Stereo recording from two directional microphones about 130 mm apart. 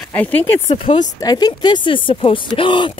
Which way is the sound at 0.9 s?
40° left (ahead or behind).